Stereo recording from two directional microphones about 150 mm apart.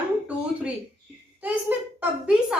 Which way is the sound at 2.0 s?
5° right (ahead or behind).